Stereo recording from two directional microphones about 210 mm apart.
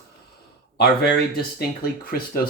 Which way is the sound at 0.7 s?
50° left (ahead or behind).